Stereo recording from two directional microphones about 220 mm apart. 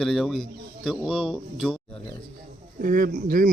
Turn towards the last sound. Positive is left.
turn(degrees=-40)  # may be behind; listen again after turning